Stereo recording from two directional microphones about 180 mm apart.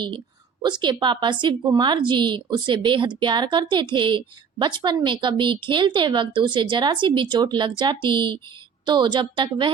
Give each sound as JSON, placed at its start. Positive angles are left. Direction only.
{"t": 0.6, "sound": "a woman's voice", "side_deg": -25}